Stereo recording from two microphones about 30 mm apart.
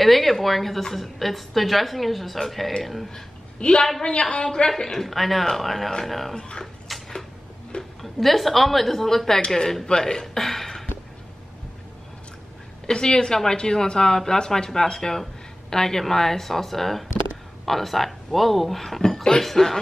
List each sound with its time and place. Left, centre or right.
0.0 s a woman's voice: centre
3.5 s a woman's voice: left
4.6 s a woman's voice: centre
5.0 s a woman's voice: centre
6.3 s speech: left
6.9 s a sound: centre
8.0 s a woman's voice: centre
9.8 s speech: left
10.2 s a sound: centre
12.8 s a woman's voice: left; by 18.9 s centre
18.9 s a woman's voice: centre